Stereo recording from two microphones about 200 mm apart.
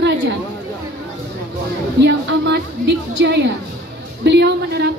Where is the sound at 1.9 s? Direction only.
60° right (ahead or behind).